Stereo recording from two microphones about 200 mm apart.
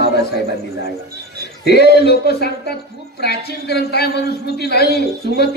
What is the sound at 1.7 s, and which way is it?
Speech, 55° left (ahead or behind).